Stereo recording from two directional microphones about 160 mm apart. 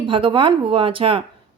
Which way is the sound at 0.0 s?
30° right (ahead or behind).